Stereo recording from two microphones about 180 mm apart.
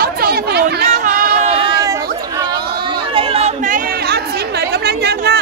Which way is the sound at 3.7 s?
60° right (ahead or behind).